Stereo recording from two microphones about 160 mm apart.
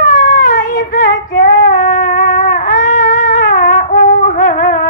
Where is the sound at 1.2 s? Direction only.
60° left (ahead or behind).